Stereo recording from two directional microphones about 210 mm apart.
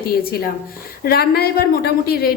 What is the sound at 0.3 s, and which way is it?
A woman's voice, 45° left (ahead or behind).